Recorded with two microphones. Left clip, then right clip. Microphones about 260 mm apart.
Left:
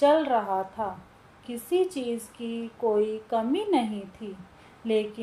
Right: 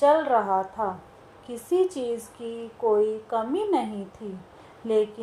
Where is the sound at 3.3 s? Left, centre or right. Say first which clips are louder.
Right 1 dB; right.